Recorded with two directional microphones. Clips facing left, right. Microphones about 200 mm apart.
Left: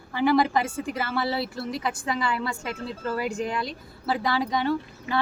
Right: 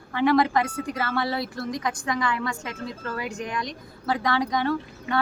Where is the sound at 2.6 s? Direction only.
30° left (ahead or behind).